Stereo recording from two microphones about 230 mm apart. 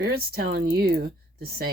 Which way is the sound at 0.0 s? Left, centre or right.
Right.